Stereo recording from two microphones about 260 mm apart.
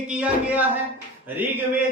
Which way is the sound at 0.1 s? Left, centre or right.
Centre.